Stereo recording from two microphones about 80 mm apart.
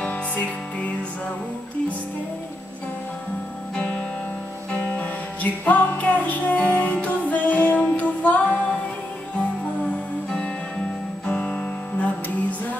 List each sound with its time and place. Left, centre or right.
0.0 s music: centre
3.7 s music: centre
11.2 s music: centre